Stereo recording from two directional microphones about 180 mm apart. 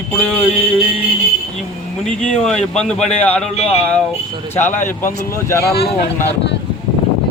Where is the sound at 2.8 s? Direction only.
5° left (ahead or behind).